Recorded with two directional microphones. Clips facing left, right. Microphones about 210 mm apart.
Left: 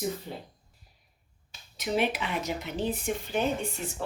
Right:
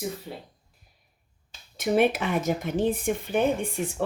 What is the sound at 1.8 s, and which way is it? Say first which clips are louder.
Speech: right 6 dB; 50° right (ahead or behind).